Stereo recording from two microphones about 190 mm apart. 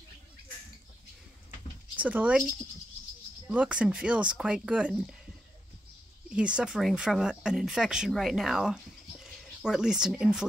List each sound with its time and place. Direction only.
2.0 s speech: 5° right (ahead or behind)
3.4 s speech: 5° right (ahead or behind)
6.3 s speech: 5° right (ahead or behind)